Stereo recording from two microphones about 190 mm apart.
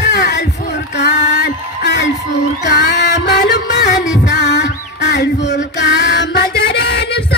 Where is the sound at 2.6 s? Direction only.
65° left (ahead or behind).